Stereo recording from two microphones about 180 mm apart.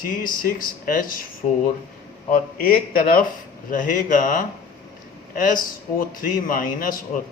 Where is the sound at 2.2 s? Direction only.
50° left (ahead or behind).